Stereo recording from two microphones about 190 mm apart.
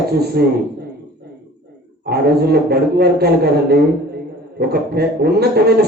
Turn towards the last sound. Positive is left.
turn(degrees=-55)  # may be behind; listen again after turning